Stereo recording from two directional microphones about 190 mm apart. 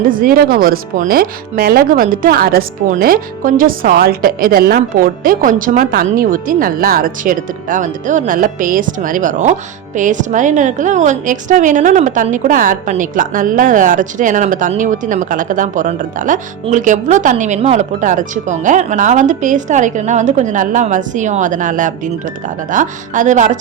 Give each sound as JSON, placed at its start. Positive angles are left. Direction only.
{"t": 0.1, "sound": "a woman's voice", "side_deg": -50}